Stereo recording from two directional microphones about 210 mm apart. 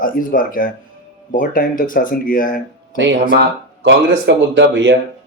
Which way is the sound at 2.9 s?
60° right (ahead or behind).